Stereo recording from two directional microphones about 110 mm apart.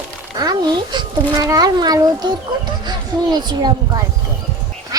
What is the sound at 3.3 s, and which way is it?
Speech, 40° right (ahead or behind).